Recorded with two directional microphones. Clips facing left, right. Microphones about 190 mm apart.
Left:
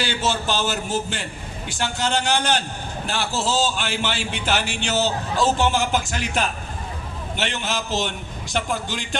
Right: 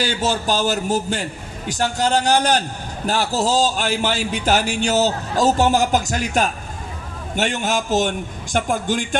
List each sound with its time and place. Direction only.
0.0 s a man's voice: 45° right (ahead or behind)